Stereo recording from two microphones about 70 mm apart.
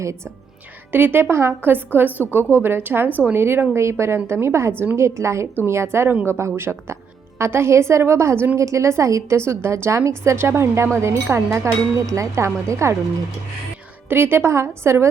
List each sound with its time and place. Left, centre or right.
0.9 s a woman's voice: right
14.1 s a woman's voice: right